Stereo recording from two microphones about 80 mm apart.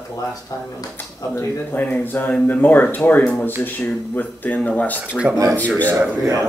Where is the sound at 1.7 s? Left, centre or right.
Left.